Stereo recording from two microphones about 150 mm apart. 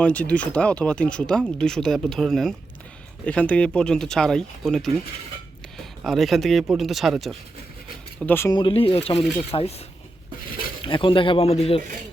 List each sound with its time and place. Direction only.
0.0 s speech: 10° left (ahead or behind)
8.2 s speech: 10° left (ahead or behind)
8.4 s speech: 30° left (ahead or behind)
10.8 s speech: 35° left (ahead or behind)